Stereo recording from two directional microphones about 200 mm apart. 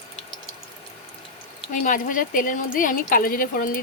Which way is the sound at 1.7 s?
40° left (ahead or behind).